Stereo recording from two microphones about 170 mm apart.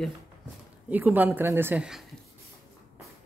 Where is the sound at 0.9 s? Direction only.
10° right (ahead or behind).